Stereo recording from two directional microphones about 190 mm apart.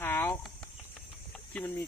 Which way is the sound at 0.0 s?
10° left (ahead or behind).